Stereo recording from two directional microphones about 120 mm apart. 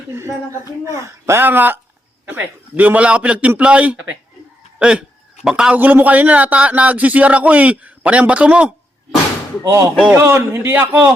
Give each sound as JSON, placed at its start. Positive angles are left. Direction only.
{"t": 0.2, "sound": "a man's voice", "side_deg": -25}
{"t": 9.6, "sound": "a man's voice", "side_deg": -25}